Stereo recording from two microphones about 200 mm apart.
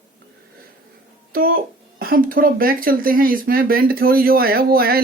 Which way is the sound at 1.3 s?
45° right (ahead or behind).